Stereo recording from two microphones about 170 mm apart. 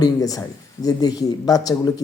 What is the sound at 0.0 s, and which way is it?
Speech, 20° left (ahead or behind).